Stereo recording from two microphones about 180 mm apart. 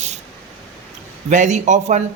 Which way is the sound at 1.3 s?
45° right (ahead or behind).